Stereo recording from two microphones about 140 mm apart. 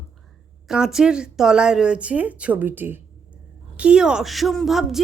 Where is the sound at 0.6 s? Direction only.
5° right (ahead or behind).